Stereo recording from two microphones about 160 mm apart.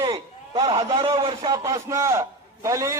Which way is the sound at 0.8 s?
25° right (ahead or behind).